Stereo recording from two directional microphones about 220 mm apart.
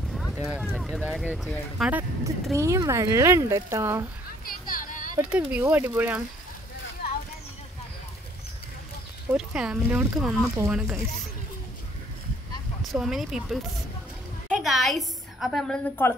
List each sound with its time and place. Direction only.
0.1 s a sound: centre (ahead or behind)
0.7 s speech: 5° left (ahead or behind); by 4.0 s 15° right (ahead or behind)
4.5 s a sound: 40° left (ahead or behind)
5.3 s speech: 10° right (ahead or behind)
9.3 s speech: 5° right (ahead or behind)
12.8 s a woman's voice: centre (ahead or behind)